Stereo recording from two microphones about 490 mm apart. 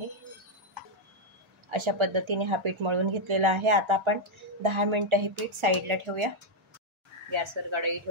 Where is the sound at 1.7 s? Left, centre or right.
Right.